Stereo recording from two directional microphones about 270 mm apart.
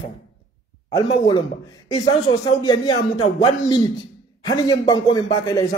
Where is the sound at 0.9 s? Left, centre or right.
Centre.